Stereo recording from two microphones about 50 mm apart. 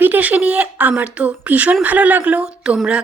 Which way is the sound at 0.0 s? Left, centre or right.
Right.